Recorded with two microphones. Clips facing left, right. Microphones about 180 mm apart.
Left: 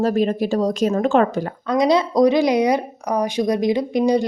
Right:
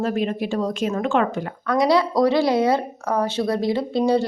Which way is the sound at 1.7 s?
20° left (ahead or behind).